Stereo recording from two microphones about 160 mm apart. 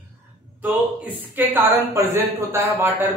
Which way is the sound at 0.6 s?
10° right (ahead or behind).